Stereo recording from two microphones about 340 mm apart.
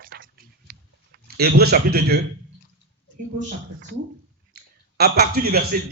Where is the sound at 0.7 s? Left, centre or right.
Right.